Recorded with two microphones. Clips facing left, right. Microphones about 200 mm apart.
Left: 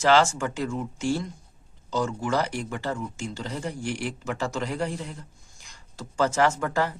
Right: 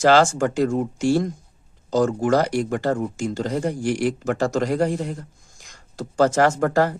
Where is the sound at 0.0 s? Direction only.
45° right (ahead or behind).